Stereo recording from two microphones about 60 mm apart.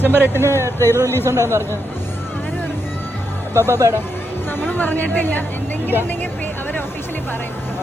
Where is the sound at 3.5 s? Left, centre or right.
Right.